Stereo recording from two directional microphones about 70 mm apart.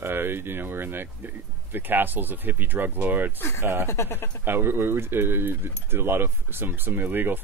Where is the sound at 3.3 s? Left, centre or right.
Left.